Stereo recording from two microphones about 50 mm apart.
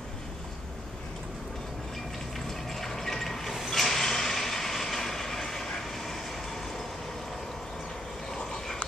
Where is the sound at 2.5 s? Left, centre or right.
Centre.